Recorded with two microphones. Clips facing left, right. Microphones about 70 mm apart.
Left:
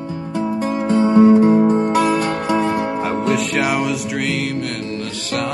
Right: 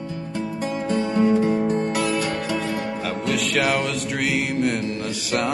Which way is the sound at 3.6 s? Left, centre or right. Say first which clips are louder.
Left 3 dB; centre.